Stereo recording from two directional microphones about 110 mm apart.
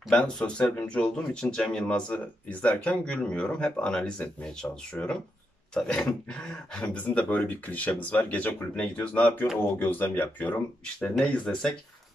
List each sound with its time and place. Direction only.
0.1 s speech: 10° left (ahead or behind)